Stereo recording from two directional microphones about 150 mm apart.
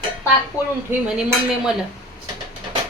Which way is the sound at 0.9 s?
5° right (ahead or behind).